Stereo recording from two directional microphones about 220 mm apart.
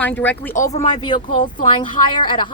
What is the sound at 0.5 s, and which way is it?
Speech, 30° left (ahead or behind).